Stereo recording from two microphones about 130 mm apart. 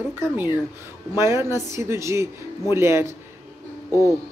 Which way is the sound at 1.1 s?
20° right (ahead or behind).